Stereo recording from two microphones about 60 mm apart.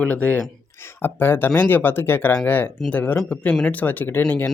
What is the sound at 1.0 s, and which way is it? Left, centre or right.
Speech, left.